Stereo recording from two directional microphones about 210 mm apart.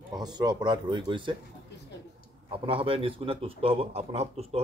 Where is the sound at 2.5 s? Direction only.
25° right (ahead or behind).